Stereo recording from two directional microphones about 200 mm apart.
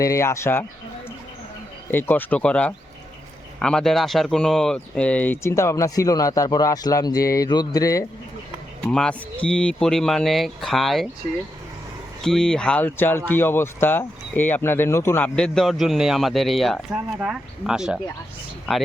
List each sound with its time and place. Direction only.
0.0 s speech: 15° left (ahead or behind)
1.9 s speech: 10° left (ahead or behind)
8.8 s speech: 5° left (ahead or behind)
12.2 s speech: 5° left (ahead or behind)